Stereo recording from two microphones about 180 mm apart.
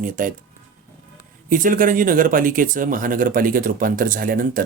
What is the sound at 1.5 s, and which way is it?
Speech, 50° right (ahead or behind).